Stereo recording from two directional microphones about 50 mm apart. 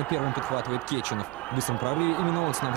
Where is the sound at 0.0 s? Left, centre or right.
Left.